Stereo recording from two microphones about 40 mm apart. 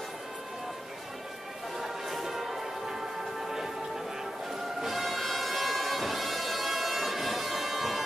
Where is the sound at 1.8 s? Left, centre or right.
Centre.